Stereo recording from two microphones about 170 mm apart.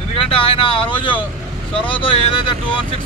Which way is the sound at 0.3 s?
30° left (ahead or behind).